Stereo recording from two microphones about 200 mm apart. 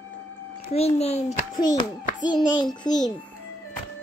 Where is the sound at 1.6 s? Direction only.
20° left (ahead or behind).